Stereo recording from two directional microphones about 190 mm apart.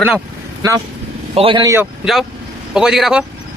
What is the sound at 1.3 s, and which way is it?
Speech, 25° right (ahead or behind).